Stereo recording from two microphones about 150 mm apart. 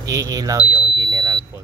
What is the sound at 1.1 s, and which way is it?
Smoke detector, 25° right (ahead or behind).